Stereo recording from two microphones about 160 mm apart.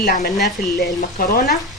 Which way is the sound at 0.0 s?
75° left (ahead or behind).